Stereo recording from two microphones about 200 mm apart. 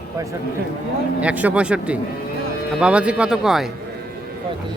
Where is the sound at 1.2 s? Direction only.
5° right (ahead or behind).